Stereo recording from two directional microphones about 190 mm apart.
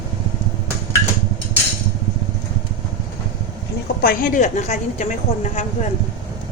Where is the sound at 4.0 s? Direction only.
50° left (ahead or behind).